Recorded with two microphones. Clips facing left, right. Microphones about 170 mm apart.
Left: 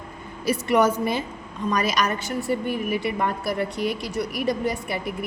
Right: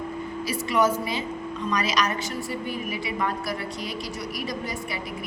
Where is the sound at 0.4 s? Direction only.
55° left (ahead or behind).